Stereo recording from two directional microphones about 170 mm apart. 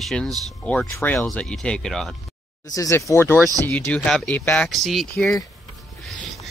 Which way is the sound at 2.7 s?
20° left (ahead or behind).